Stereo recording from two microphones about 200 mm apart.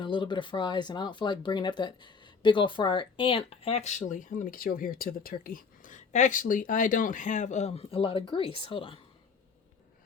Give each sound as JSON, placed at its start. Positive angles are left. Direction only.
{"t": 0.0, "sound": "speech", "side_deg": 25}